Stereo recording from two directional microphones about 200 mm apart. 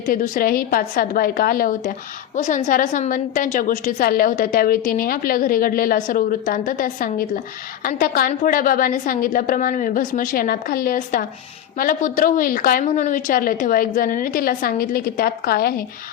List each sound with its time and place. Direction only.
0.1 s a woman's voice: 45° left (ahead or behind)